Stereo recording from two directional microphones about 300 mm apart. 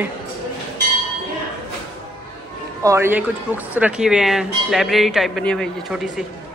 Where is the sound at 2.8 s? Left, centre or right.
Centre.